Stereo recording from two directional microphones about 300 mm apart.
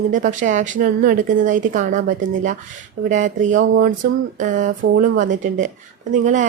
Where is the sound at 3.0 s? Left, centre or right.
Right.